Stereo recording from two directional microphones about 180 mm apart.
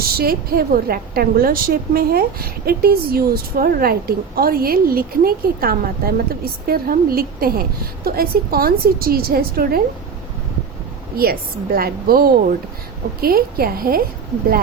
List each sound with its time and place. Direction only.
0.2 s a woman's voice: 55° right (ahead or behind)
11.2 s a woman's voice: 55° right (ahead or behind)